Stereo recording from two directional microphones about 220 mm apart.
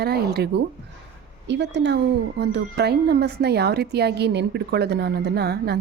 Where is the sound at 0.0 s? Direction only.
45° right (ahead or behind).